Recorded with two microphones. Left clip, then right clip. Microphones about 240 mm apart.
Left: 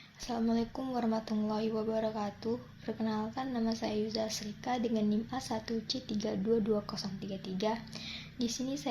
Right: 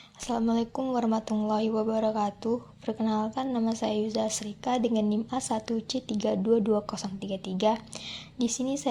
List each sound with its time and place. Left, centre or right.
0.3 s speech: right